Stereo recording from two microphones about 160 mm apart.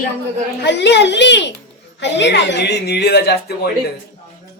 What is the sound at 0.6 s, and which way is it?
Speech, 90° left.